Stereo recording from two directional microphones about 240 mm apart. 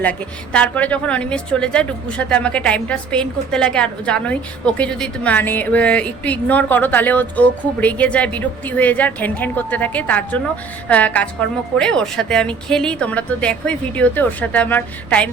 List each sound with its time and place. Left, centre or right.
0.0 s a woman's voice: centre